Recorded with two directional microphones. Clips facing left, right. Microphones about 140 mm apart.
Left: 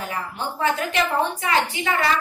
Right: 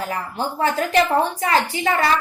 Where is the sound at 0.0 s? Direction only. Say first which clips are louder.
Right 3 dB; 35° right (ahead or behind).